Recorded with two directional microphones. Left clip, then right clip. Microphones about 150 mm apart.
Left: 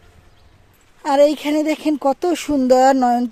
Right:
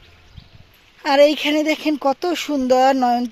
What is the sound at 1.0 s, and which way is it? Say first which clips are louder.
Speech: right 1 dB; 20° left (ahead or behind).